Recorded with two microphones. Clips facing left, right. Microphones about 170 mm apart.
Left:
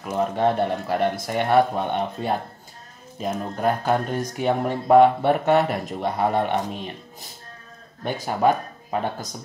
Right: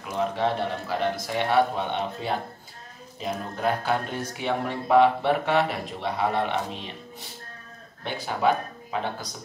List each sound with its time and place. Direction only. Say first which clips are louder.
0.1 s speech: left 4 dB; 45° left (ahead or behind)